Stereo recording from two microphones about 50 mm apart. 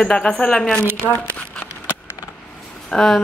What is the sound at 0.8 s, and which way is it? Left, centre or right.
Speech, right.